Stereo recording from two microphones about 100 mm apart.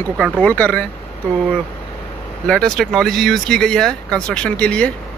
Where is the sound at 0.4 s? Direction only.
15° left (ahead or behind).